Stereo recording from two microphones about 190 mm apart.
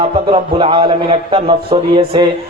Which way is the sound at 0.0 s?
30° right (ahead or behind).